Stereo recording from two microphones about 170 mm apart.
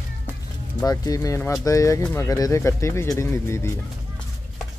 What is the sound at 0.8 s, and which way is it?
Speech, 20° left (ahead or behind).